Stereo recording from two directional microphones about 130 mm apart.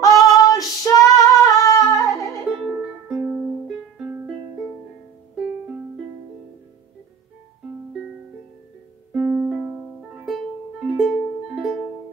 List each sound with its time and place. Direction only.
0.0 s female singing: 25° left (ahead or behind)
3.1 s music: 5° right (ahead or behind)
9.1 s music: 10° right (ahead or behind)